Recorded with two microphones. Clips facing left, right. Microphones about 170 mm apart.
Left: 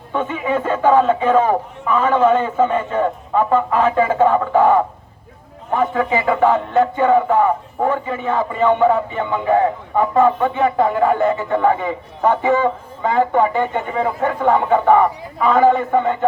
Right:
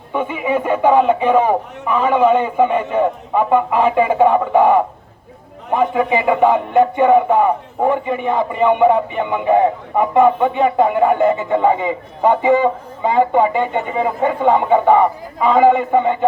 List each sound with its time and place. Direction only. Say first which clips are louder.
0.1 s speech: right 1 dB; 10° right (ahead or behind)